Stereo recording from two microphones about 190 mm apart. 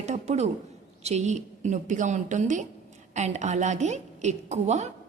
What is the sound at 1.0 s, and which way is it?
A woman's voice, 35° right (ahead or behind).